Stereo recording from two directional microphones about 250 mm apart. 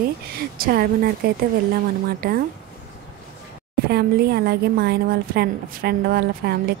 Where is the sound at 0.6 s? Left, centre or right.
Right.